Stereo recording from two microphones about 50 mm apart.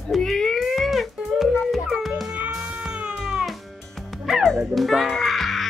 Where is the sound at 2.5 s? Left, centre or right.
Centre.